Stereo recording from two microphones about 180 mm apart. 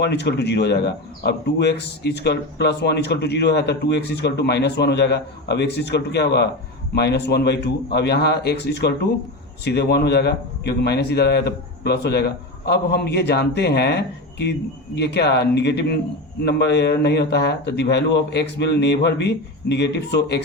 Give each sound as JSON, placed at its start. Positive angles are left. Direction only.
{"t": 0.0, "sound": "a man's voice", "side_deg": 70}